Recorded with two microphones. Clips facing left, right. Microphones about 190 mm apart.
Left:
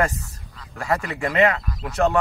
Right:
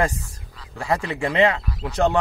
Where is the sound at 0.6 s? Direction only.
15° right (ahead or behind).